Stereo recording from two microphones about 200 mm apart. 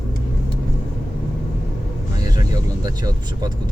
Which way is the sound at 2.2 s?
20° right (ahead or behind).